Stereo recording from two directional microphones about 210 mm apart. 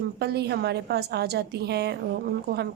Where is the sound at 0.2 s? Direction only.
50° right (ahead or behind).